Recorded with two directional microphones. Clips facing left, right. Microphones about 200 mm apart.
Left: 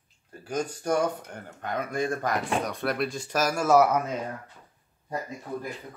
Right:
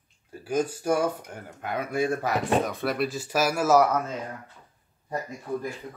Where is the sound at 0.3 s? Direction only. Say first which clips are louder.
Right 4 dB; 10° right (ahead or behind).